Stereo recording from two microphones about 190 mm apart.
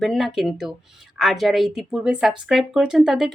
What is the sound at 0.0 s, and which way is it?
Speech, centre (ahead or behind).